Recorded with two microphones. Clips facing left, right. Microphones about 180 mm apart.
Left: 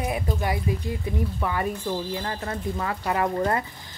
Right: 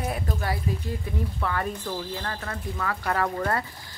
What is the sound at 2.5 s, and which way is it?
Speech, 25° left (ahead or behind).